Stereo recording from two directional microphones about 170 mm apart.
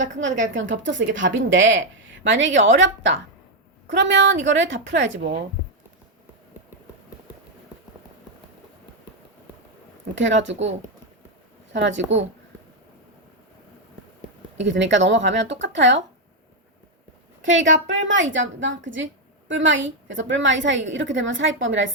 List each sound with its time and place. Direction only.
0.0 s a woman's voice: 90° right
10.2 s a woman's voice: 90° right
11.7 s a woman's voice: 90° right
14.6 s a woman's voice: 90° right
17.4 s a woman's voice: 90° right